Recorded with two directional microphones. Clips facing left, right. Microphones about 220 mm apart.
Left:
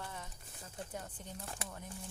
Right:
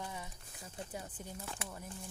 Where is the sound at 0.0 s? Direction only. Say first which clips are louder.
Right 2 dB; 10° right (ahead or behind).